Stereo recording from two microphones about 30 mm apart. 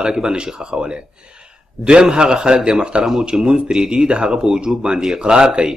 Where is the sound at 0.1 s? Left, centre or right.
Right.